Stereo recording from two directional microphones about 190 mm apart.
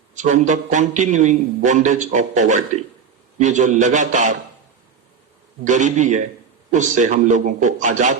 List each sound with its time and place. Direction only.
0.1 s a man's voice: 40° right (ahead or behind)
5.6 s a man's voice: 40° right (ahead or behind)